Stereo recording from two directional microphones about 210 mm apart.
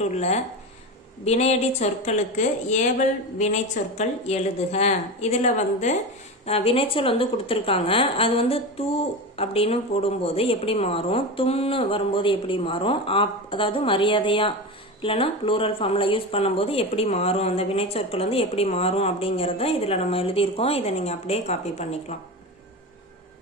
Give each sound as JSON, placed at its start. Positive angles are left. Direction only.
{"t": 0.0, "sound": "a woman's voice", "side_deg": 30}
{"t": 4.0, "sound": "a woman's voice", "side_deg": 30}